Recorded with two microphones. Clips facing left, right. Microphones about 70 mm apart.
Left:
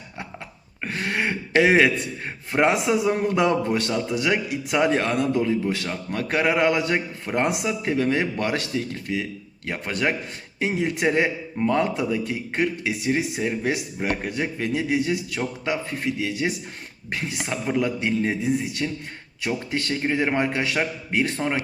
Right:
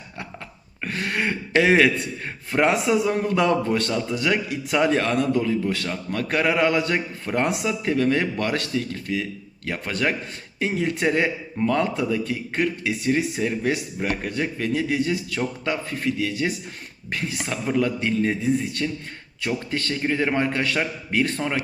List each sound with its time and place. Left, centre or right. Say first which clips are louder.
0.8 s a man's voice: even; centre